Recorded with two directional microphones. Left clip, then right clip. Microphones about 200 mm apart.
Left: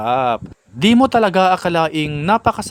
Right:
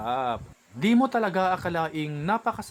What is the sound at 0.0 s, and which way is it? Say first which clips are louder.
Speech: left 11 dB; 50° left (ahead or behind).